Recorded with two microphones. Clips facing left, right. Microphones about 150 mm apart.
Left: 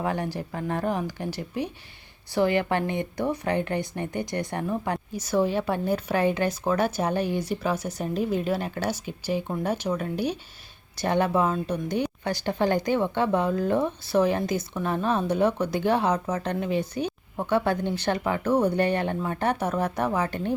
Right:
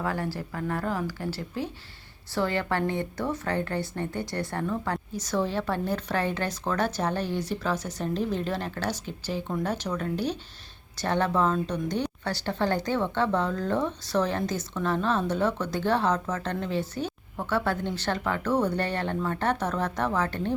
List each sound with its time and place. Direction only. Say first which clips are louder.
0.0 s a woman's voice: left 2 dB; 20° left (ahead or behind)